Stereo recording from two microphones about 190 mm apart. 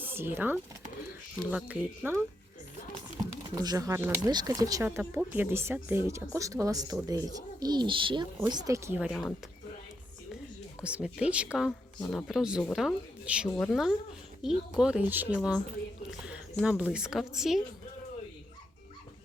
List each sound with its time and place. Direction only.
0.0 s speech: 10° right (ahead or behind)
3.5 s speech: 20° right (ahead or behind); by 9.3 s 5° right (ahead or behind)
10.8 s speech: 5° right (ahead or behind)